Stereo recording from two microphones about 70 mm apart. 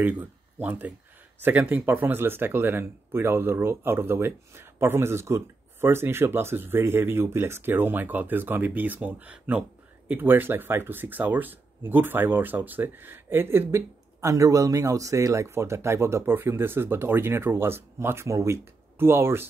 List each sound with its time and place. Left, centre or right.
0.0 s speech: right
18.9 s speech: right